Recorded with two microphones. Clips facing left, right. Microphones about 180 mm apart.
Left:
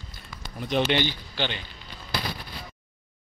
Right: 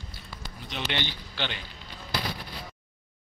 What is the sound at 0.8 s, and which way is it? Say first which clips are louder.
Speech: left 4 dB; 10° left (ahead or behind).